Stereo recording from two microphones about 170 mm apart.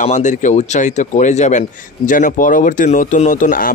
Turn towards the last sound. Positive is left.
turn(degrees=50)  # may be behind; listen again after turning